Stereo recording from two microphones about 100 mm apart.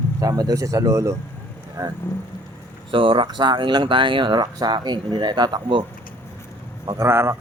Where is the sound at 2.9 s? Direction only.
60° right (ahead or behind).